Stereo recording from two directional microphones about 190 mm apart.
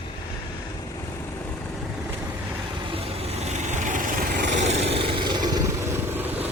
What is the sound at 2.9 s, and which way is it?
Vehicle, 35° right (ahead or behind).